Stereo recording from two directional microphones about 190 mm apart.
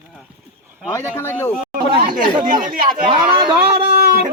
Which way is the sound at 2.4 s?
45° right (ahead or behind).